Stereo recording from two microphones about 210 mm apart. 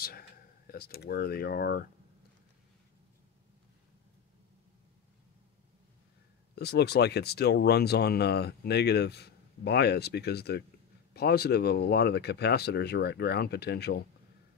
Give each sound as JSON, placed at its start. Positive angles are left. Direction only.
{"t": 0.7, "sound": "speech", "side_deg": 45}
{"t": 6.5, "sound": "speech", "side_deg": 50}